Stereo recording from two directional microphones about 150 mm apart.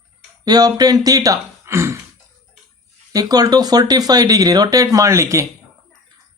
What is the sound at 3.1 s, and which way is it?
Speech, 25° right (ahead or behind).